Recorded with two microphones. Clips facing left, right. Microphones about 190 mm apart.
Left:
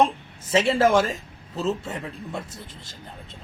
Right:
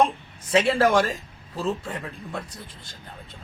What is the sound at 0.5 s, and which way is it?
Speech, centre (ahead or behind).